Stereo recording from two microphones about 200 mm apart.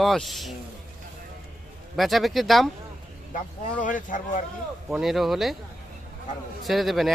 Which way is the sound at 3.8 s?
40° left (ahead or behind).